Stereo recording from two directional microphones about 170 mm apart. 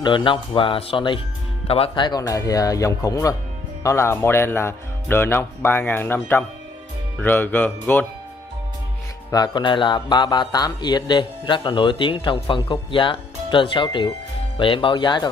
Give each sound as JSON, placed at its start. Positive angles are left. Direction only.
{"t": 0.0, "sound": "speech", "side_deg": 30}
{"t": 9.3, "sound": "speech", "side_deg": 25}